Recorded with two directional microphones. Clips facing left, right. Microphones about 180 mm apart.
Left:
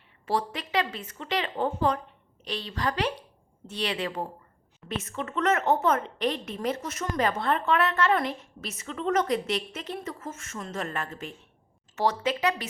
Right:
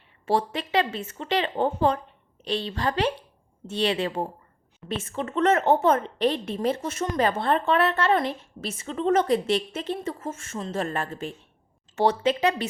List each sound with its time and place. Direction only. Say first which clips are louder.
0.3 s a woman's voice: right 4 dB; 25° right (ahead or behind)